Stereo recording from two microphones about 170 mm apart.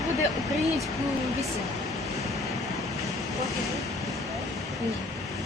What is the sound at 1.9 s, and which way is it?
Vehicle, centre (ahead or behind).